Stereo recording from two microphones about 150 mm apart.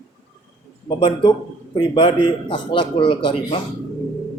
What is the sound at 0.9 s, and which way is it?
A man's voice, 30° left (ahead or behind).